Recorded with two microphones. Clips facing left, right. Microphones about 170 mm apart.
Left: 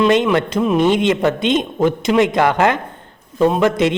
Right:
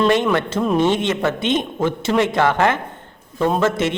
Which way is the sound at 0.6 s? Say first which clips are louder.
Left 3 dB; centre (ahead or behind).